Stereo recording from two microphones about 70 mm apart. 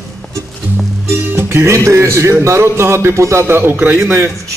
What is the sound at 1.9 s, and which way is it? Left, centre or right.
Speech, right.